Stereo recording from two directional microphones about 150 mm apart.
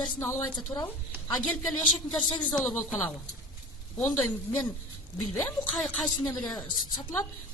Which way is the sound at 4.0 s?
10° left (ahead or behind).